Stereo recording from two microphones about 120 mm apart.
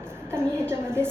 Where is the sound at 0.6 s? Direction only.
20° right (ahead or behind).